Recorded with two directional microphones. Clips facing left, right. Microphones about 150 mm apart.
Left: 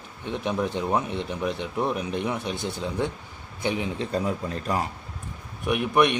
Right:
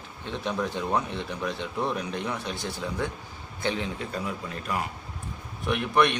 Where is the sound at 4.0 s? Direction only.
35° left (ahead or behind).